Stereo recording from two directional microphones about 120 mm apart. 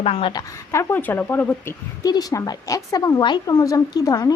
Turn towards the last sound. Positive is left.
turn(degrees=30)  # may be behind; listen again after turning